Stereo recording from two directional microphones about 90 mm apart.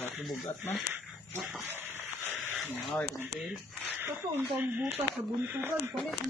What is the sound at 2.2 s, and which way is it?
Dog, 25° right (ahead or behind).